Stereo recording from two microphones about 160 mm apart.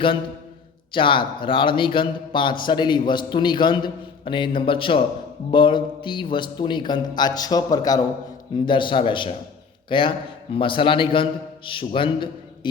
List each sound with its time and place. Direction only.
0.9 s a man's voice: 30° left (ahead or behind)